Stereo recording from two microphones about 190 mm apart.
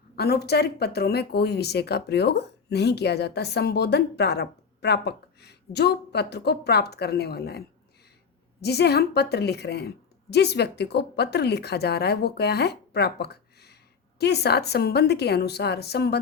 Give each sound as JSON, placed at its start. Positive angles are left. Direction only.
{"t": 0.2, "sound": "speech", "side_deg": 55}
{"t": 8.6, "sound": "speech", "side_deg": 60}